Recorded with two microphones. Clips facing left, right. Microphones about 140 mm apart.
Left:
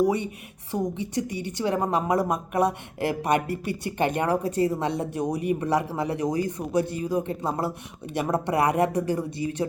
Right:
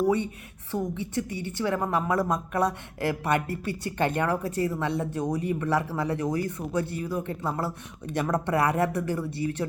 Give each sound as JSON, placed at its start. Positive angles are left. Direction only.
{"t": 0.0, "sound": "a woman's voice", "side_deg": 15}